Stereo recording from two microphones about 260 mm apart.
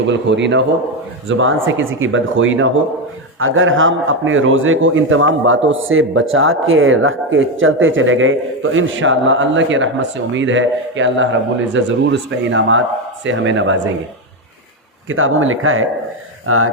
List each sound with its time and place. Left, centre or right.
0.1 s a man's voice: right
15.1 s a man's voice: right